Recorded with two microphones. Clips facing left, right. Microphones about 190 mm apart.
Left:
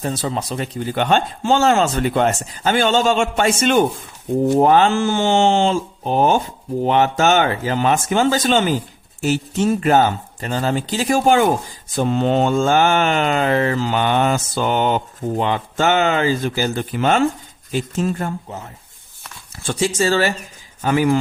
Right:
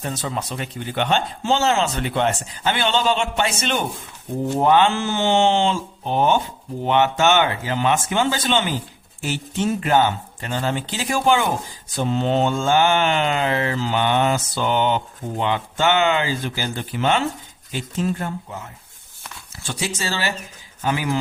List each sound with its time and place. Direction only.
0.0 s mantra: 35° left (ahead or behind)
6.8 s speech: 40° left (ahead or behind)
11.9 s mantra: 50° left (ahead or behind)